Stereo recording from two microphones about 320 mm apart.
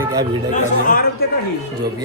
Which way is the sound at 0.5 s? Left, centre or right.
Left.